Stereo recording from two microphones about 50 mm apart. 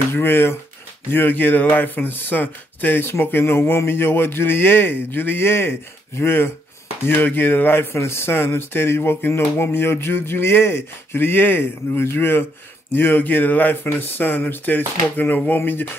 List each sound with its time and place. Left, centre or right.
0.1 s speech: left
7.1 s speech: left
9.3 s speech: left